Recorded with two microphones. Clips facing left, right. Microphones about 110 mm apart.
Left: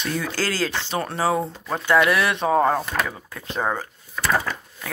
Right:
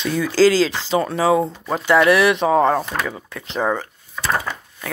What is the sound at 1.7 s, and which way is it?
Speech, 90° right.